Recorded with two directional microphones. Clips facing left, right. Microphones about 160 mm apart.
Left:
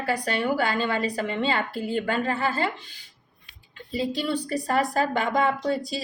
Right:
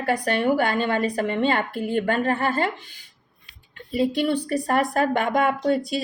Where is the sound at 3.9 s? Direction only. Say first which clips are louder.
Right 5 dB; 55° right (ahead or behind).